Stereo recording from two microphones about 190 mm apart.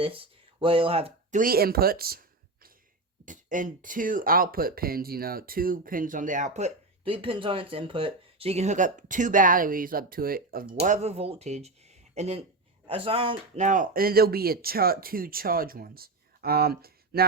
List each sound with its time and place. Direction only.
0.0 s speech: 30° right (ahead or behind)
1.4 s speech: 50° right (ahead or behind)
3.2 s speech: 45° right (ahead or behind)
10.9 s speech: 35° right (ahead or behind)
13.7 s speech: 45° right (ahead or behind)